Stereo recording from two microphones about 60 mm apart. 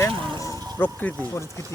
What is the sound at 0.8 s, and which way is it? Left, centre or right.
Speech, left.